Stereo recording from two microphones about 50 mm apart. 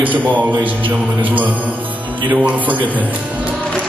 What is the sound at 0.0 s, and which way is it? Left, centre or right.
A man's voice, right.